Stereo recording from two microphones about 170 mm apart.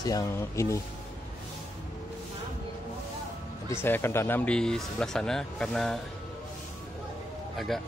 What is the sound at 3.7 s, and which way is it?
A man's voice, 15° left (ahead or behind).